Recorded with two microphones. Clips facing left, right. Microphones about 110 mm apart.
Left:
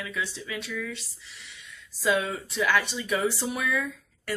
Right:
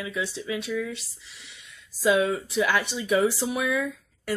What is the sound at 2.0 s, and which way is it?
Speech, 10° right (ahead or behind).